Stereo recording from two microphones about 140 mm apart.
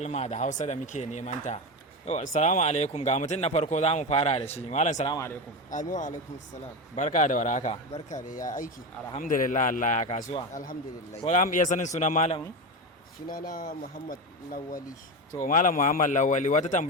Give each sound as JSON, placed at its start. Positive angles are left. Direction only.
{"t": 0.0, "sound": "speech", "side_deg": 55}
{"t": 5.0, "sound": "a man's voice", "side_deg": 25}
{"t": 5.7, "sound": "a man's voice", "side_deg": 65}
{"t": 10.5, "sound": "a man's voice", "side_deg": 75}
{"t": 13.2, "sound": "speech", "side_deg": 90}
{"t": 15.4, "sound": "speech", "side_deg": 70}